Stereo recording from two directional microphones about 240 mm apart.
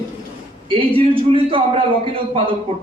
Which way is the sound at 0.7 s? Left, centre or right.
Right.